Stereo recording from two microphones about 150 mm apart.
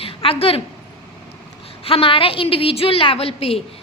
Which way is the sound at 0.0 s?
40° left (ahead or behind).